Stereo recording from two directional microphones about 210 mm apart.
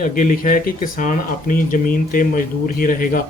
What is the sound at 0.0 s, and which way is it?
Speech, 40° left (ahead or behind).